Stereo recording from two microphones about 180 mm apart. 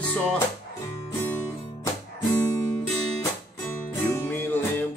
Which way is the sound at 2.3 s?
15° left (ahead or behind).